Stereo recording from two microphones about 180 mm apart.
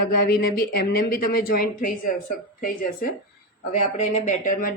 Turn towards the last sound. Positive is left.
turn(degrees=45)  # may be behind; listen again after turning